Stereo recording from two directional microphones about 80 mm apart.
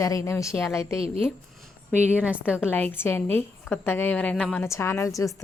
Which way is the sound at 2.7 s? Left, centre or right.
Left.